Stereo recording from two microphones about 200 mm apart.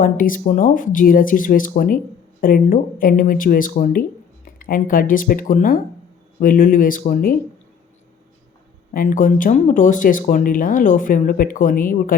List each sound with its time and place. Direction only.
0.0 s speech: 45° left (ahead or behind)
8.9 s speech: 45° left (ahead or behind)